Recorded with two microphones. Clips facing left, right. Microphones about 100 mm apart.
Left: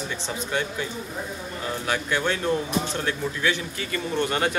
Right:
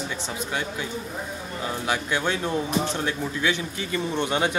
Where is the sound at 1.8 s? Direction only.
15° right (ahead or behind).